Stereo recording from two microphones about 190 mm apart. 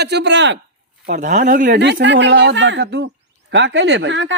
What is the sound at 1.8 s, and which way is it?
Speech, 70° right (ahead or behind).